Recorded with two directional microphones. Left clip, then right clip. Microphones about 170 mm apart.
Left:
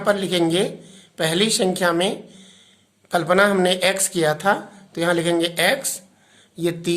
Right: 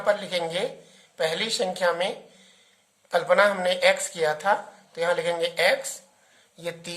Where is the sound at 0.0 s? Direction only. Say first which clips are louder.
Left 5 dB; 25° left (ahead or behind).